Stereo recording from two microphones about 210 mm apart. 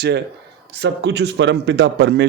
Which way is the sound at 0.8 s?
55° right (ahead or behind).